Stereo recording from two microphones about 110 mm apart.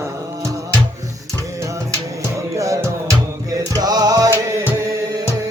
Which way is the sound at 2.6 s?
30° right (ahead or behind).